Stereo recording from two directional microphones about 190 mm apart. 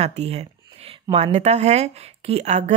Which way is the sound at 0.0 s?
35° right (ahead or behind).